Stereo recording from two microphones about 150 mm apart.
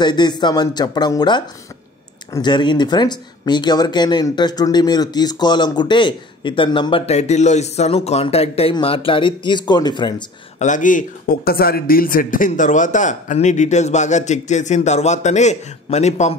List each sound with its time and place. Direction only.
0.0 s speech: 30° left (ahead or behind)
10.6 s speech: 60° left (ahead or behind)